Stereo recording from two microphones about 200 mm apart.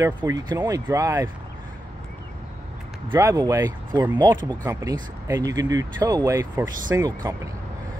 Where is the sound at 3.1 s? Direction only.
15° right (ahead or behind).